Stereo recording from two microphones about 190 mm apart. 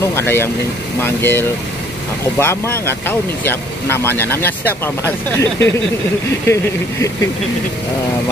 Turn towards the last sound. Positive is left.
turn(degrees=15)  # may be behind; listen again after turning